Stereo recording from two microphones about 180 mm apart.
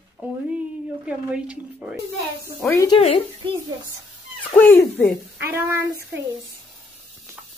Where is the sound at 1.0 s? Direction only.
5° right (ahead or behind).